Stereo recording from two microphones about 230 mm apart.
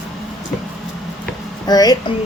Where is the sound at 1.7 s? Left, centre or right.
Centre.